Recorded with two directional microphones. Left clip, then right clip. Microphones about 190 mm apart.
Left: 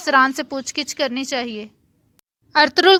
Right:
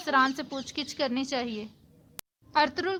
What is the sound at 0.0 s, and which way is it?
A woman's voice, 40° left (ahead or behind).